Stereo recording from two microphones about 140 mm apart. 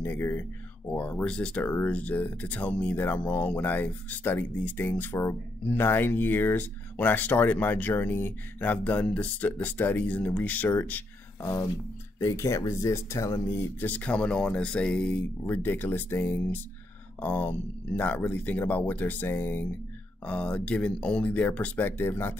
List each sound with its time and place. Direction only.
0.0 s speech: 15° left (ahead or behind)
11.4 s speech: 25° left (ahead or behind)